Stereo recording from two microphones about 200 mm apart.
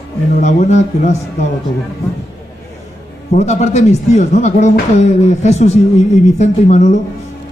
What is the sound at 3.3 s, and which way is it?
Speech, 35° left (ahead or behind).